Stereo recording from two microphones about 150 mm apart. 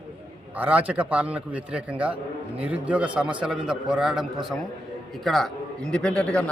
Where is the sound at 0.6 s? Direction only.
10° right (ahead or behind).